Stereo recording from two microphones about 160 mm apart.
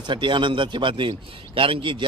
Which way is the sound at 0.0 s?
30° right (ahead or behind).